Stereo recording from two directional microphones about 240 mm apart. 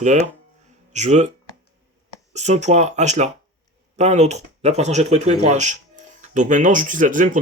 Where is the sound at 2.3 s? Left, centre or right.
Right.